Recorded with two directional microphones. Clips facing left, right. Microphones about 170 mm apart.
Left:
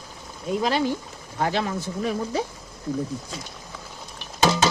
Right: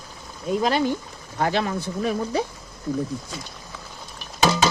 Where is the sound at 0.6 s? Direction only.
50° right (ahead or behind).